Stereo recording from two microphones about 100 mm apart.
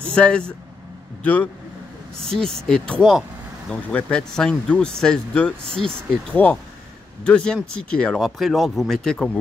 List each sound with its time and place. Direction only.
0.0 s a man's voice: 10° left (ahead or behind)
2.1 s speech: 5° left (ahead or behind)